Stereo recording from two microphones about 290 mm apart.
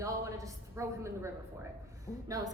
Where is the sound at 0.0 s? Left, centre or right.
Centre.